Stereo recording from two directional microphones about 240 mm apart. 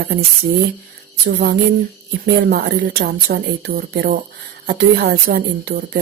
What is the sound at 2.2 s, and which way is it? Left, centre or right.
A woman's voice, right.